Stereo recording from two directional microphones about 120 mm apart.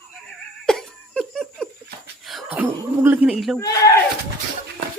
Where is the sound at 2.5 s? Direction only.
15° right (ahead or behind).